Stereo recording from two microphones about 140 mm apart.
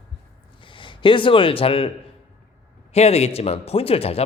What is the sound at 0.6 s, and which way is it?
Speech, 35° left (ahead or behind).